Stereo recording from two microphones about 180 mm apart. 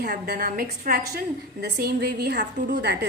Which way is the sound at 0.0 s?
55° right (ahead or behind).